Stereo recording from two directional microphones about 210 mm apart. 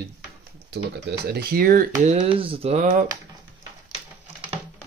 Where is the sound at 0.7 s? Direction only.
50° right (ahead or behind).